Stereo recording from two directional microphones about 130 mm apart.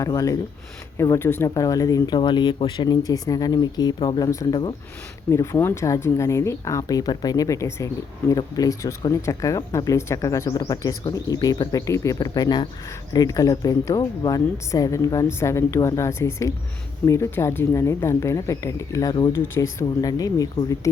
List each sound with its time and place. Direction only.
0.0 s speech: 25° left (ahead or behind)